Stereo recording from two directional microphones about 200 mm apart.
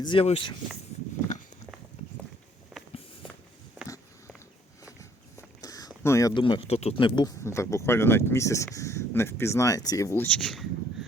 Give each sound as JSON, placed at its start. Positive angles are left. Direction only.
{"t": 0.0, "sound": "speech", "side_deg": 25}
{"t": 2.7, "sound": "walk", "side_deg": 0}
{"t": 4.9, "sound": "a sound", "side_deg": 15}
{"t": 6.0, "sound": "speech", "side_deg": 15}